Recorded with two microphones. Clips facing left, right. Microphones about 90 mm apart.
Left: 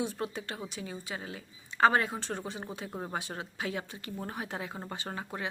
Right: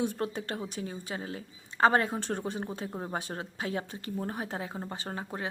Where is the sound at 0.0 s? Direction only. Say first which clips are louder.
Right 3 dB; 50° right (ahead or behind).